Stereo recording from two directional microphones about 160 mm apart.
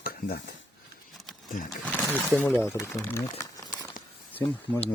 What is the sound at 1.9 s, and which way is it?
Speech, 10° left (ahead or behind).